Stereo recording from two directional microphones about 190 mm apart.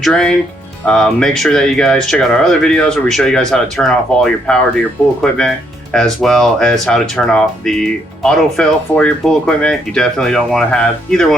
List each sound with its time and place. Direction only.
0.0 s speech: 5° left (ahead or behind)